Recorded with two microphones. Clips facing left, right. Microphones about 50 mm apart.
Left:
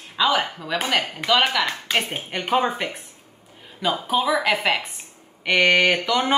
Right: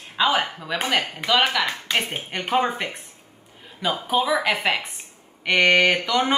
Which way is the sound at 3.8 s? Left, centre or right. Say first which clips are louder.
Even; centre.